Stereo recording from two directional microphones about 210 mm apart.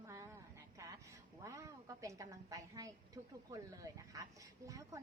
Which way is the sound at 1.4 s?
15° right (ahead or behind).